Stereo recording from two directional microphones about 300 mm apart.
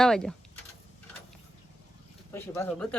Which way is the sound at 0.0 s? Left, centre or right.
Centre.